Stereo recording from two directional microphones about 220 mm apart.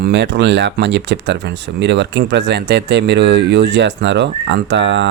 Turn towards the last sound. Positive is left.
turn(degrees=-55)  # may be behind; listen again after turning